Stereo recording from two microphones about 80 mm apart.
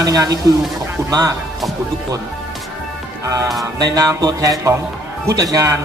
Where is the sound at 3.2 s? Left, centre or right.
Right.